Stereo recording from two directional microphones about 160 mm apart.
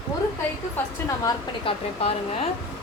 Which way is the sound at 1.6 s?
35° left (ahead or behind).